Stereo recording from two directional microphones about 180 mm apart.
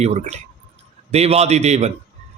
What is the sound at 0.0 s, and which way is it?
Speech, 40° right (ahead or behind).